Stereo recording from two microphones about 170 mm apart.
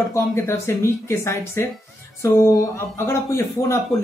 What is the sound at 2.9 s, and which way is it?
Speech, 15° left (ahead or behind).